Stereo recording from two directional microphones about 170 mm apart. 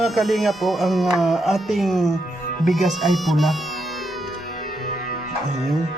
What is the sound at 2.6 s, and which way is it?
Music, centre (ahead or behind).